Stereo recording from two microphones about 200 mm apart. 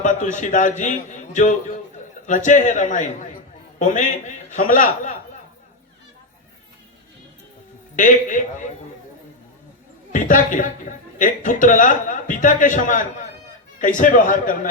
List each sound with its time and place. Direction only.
0.0 s speech: 40° left (ahead or behind)
7.9 s speech: 40° left (ahead or behind)
10.1 s speech: 40° left (ahead or behind)